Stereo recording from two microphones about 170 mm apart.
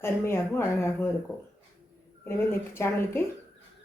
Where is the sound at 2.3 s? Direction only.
15° left (ahead or behind).